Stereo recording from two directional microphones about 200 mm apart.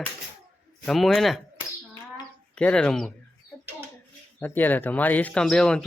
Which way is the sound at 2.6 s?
5° left (ahead or behind).